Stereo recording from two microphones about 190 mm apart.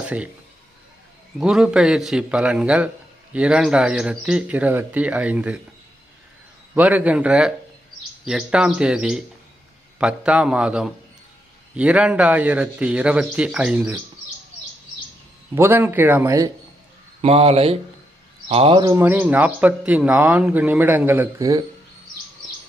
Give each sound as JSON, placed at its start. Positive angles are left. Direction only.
{"t": 0.0, "sound": "a man's voice", "side_deg": -5}
{"t": 1.4, "sound": "a man's voice", "side_deg": -5}
{"t": 6.7, "sound": "a man's voice", "side_deg": -10}
{"t": 15.5, "sound": "a man's voice", "side_deg": -10}
{"t": 17.2, "sound": "a man's voice", "side_deg": -30}